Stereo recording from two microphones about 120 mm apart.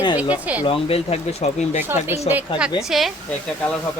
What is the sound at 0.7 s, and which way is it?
Speech, 55° left (ahead or behind).